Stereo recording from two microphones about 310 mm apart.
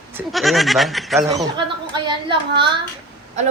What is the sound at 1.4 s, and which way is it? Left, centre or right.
Speech, centre.